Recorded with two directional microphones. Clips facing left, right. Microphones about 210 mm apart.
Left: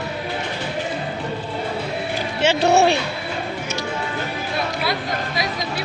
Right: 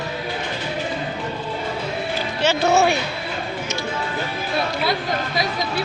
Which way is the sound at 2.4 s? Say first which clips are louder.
Left 2 dB; 30° left (ahead or behind).